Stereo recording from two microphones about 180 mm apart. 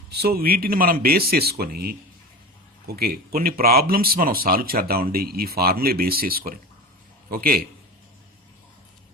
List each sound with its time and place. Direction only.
0.1 s speech: 60° right (ahead or behind)